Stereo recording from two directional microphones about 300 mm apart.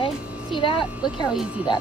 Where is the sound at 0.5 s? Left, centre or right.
Centre.